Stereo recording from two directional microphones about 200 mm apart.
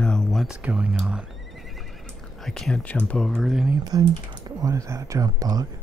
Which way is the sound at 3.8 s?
20° right (ahead or behind).